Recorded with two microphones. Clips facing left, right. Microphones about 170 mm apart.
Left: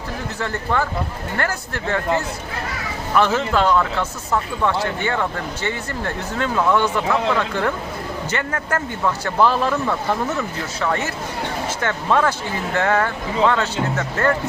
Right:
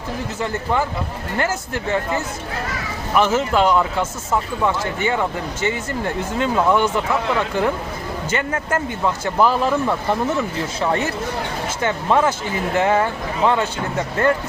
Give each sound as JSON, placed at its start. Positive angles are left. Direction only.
{"t": 0.3, "sound": "speech", "side_deg": -10}
{"t": 8.7, "sound": "speech", "side_deg": -15}
{"t": 10.8, "sound": "speech", "side_deg": -25}
{"t": 11.8, "sound": "speech", "side_deg": -10}
{"t": 14.2, "sound": "speech", "side_deg": -25}